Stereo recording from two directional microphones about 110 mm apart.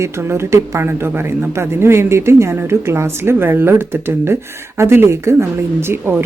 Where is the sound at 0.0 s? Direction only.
25° right (ahead or behind).